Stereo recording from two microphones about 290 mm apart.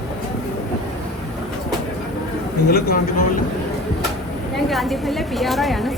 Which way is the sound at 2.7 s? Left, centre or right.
Left.